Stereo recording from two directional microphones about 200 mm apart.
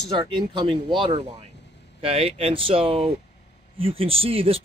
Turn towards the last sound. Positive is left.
turn(degrees=-30)  # may be behind; listen again after turning